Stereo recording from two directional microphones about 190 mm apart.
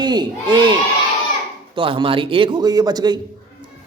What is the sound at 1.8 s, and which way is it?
A man's voice, 30° right (ahead or behind).